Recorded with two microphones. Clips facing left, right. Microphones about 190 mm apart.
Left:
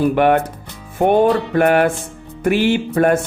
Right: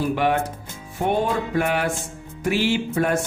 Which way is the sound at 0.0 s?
60° left (ahead or behind).